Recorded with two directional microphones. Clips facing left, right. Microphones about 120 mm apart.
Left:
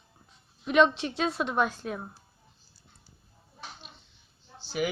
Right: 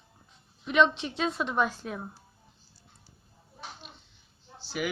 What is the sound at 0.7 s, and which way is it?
A woman's voice, 10° left (ahead or behind).